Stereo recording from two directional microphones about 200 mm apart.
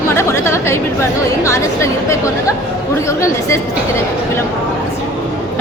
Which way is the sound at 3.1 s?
15° left (ahead or behind).